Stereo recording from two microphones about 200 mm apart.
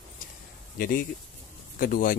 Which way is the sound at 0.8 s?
45° left (ahead or behind).